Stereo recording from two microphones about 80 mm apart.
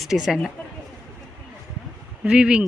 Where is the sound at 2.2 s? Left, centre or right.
Centre.